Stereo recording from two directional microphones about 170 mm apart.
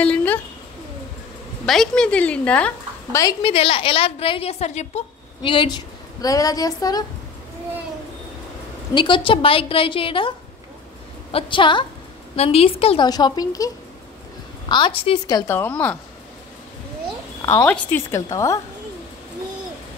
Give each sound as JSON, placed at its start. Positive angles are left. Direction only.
{"t": 0.0, "sound": "a sound", "side_deg": 10}
{"t": 1.7, "sound": "speech", "side_deg": 5}
{"t": 3.2, "sound": "a woman's voice", "side_deg": 20}
{"t": 3.5, "sound": "a woman's voice", "side_deg": 35}
{"t": 8.9, "sound": "a woman's voice", "side_deg": 30}
{"t": 11.3, "sound": "a woman's voice", "side_deg": 30}
{"t": 14.7, "sound": "a woman's voice", "side_deg": 30}
{"t": 15.5, "sound": "speech", "side_deg": 10}
{"t": 17.5, "sound": "speech", "side_deg": 15}